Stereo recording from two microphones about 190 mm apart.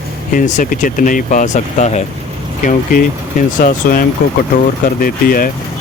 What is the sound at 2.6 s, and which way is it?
Speech, 45° left (ahead or behind).